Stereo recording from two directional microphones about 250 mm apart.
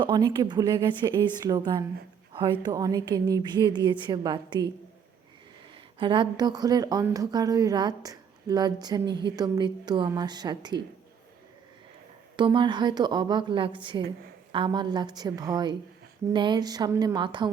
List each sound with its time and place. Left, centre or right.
0.0 s speech: centre
5.7 s speech: centre
12.4 s speech: centre